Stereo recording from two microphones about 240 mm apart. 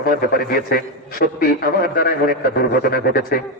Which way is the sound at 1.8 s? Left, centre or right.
Left.